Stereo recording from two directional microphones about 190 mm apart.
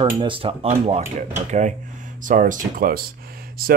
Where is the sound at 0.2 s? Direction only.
25° right (ahead or behind).